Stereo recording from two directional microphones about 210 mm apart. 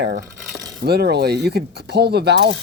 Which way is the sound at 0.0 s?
55° right (ahead or behind).